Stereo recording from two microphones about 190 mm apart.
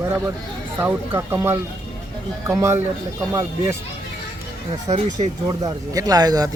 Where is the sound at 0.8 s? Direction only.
10° right (ahead or behind).